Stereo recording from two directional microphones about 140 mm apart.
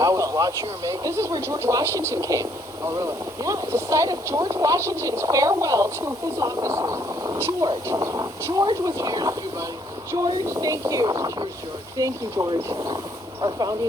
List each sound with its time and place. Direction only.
0.0 s speech: 25° right (ahead or behind)